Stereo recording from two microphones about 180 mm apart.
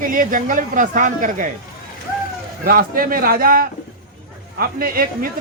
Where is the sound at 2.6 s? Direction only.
50° right (ahead or behind).